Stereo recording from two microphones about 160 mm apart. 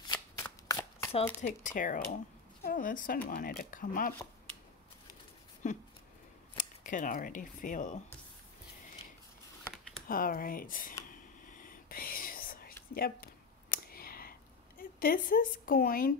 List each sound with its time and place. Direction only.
0.1 s shuffling cards: 20° left (ahead or behind)
1.4 s speech: 50° left (ahead or behind)
5.6 s speech: 50° left (ahead or behind)
10.0 s speech: 60° left (ahead or behind)
11.5 s whispering: 60° left (ahead or behind)
12.9 s a sound: 65° left (ahead or behind)
14.8 s speech: 65° left (ahead or behind)